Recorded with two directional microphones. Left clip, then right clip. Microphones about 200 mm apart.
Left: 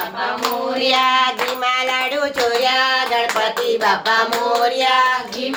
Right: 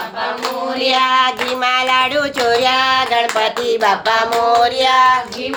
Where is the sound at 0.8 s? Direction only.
20° right (ahead or behind).